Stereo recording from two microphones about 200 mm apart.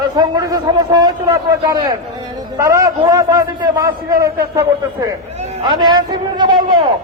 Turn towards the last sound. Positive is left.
turn(degrees=-20)  # may be behind; listen again after turning